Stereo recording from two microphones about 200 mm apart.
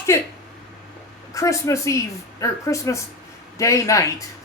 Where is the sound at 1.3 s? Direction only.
15° left (ahead or behind).